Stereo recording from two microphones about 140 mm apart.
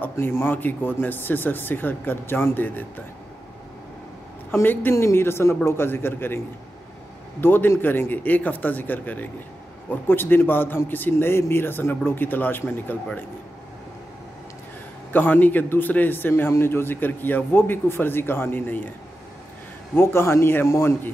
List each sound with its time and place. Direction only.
0.0 s a man's voice: 15° left (ahead or behind)
4.5 s a man's voice: 15° left (ahead or behind)
15.1 s a man's voice: 15° left (ahead or behind)
20.0 s a man's voice: 15° left (ahead or behind)